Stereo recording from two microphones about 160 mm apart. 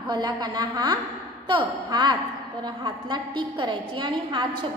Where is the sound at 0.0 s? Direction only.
25° right (ahead or behind).